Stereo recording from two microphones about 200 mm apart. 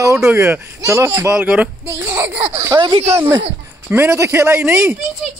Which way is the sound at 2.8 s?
25° right (ahead or behind).